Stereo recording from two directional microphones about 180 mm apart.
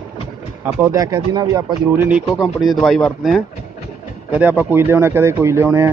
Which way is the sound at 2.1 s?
5° right (ahead or behind).